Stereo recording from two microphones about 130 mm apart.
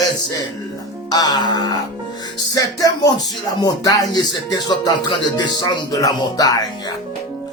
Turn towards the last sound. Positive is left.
turn(degrees=30)  # may be behind; listen again after turning